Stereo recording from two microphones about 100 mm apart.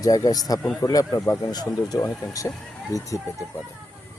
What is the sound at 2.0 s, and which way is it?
Speech, 30° left (ahead or behind).